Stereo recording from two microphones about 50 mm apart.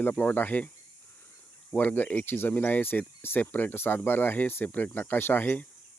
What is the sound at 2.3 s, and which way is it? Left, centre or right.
Speech, left.